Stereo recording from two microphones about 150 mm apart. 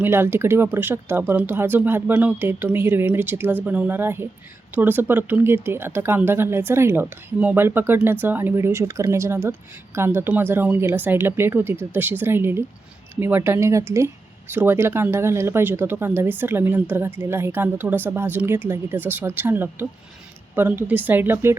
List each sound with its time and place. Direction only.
0.0 s speech: 15° right (ahead or behind)